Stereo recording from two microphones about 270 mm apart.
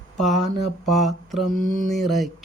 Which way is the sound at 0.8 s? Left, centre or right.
Centre.